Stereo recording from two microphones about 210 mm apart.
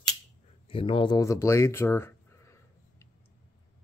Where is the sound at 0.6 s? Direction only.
25° left (ahead or behind).